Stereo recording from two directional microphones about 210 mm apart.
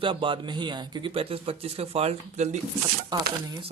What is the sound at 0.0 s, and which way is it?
A man's voice, 25° right (ahead or behind).